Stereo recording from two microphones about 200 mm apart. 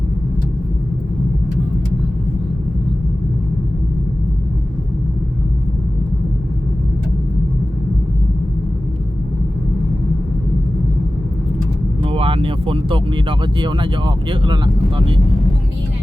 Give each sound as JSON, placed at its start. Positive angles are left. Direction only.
{"t": 12.0, "sound": "speech", "side_deg": -25}